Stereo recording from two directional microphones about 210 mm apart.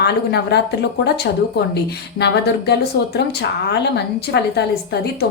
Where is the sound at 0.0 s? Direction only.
50° left (ahead or behind).